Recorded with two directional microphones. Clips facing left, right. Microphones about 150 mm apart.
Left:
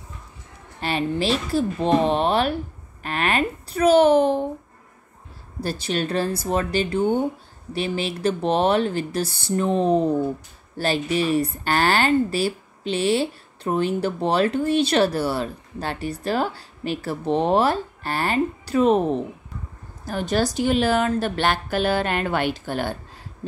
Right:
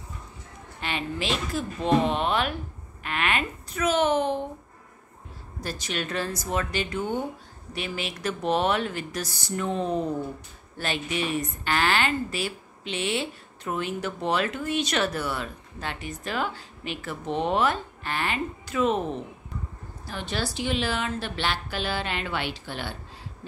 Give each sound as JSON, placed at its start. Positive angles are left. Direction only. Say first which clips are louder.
{"t": 0.7, "sound": "a woman's voice", "louder": "left 7 dB", "side_deg": 35}
{"t": 5.6, "sound": "a woman's voice", "louder": "left 7 dB", "side_deg": 30}